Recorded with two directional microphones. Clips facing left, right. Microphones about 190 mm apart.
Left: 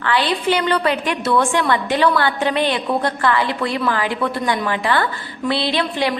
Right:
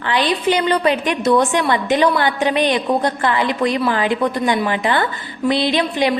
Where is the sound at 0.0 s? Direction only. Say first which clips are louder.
Right 1 dB; 20° right (ahead or behind).